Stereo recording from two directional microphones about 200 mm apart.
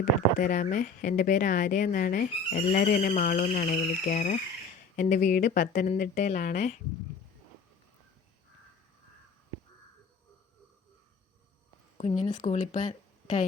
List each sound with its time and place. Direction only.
0.0 s speech: 45° left (ahead or behind)
11.9 s speech: 30° left (ahead or behind)